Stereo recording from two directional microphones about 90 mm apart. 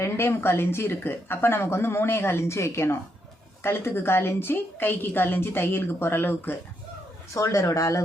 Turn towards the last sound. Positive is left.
turn(degrees=35)  # may be behind; listen again after turning